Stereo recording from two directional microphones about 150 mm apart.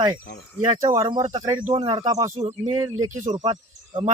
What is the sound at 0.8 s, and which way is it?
Speech, 25° right (ahead or behind).